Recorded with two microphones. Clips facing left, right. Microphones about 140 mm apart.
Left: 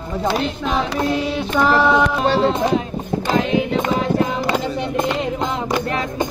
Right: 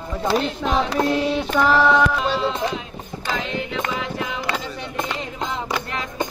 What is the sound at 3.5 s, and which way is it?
Music, 45° left (ahead or behind).